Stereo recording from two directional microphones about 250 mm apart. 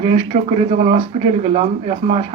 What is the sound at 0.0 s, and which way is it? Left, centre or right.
Speech, right.